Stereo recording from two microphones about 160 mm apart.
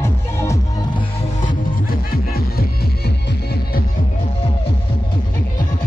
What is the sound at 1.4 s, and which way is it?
Music, 60° left (ahead or behind).